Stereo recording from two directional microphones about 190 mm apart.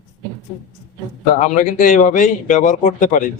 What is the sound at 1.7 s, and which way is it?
Speech, 40° left (ahead or behind).